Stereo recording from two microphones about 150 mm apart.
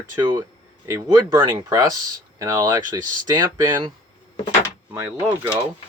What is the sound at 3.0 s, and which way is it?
Speech, 65° right (ahead or behind).